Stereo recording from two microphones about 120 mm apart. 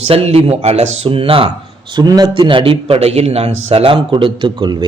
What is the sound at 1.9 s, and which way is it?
A man's voice, 35° right (ahead or behind).